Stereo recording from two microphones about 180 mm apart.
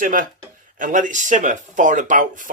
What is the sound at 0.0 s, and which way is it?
Speech, 50° right (ahead or behind).